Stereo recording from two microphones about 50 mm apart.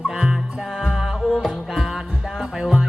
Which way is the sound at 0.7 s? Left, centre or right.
Centre.